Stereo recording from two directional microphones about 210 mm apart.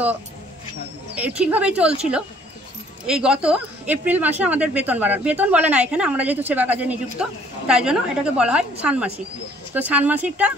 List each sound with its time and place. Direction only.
1.1 s speech: 5° right (ahead or behind)
3.1 s speech: 5° right (ahead or behind)